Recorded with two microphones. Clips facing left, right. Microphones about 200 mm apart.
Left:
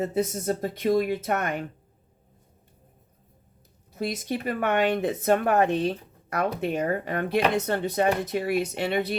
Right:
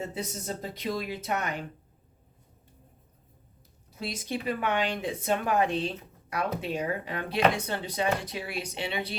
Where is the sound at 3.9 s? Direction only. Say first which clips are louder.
Left 5 dB; 50° left (ahead or behind).